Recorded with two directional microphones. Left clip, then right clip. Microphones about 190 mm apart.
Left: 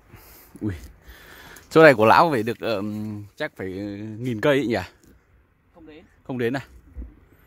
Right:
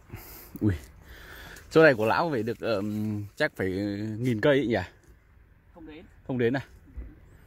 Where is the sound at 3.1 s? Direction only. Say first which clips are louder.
Right 2 dB; centre (ahead or behind).